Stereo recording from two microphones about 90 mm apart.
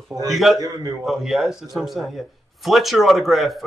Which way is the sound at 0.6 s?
40° right (ahead or behind).